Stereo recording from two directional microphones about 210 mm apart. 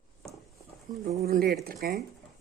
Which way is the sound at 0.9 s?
40° right (ahead or behind).